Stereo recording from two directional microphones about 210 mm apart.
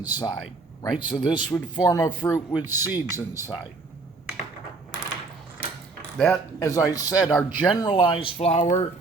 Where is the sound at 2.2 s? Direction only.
10° left (ahead or behind).